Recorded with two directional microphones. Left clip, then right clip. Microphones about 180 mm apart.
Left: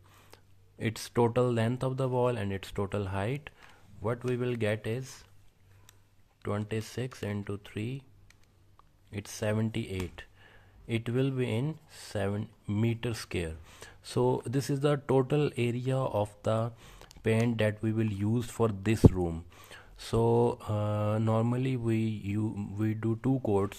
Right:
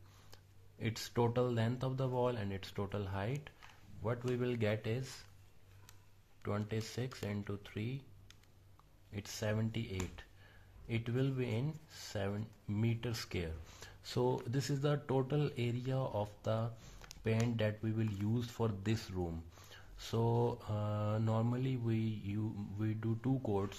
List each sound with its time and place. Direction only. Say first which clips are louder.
0.3 s speech: left 5 dB; 35° left (ahead or behind)
6.4 s speech: left 6 dB; 35° left (ahead or behind)
9.1 s speech: left 7 dB; 35° left (ahead or behind)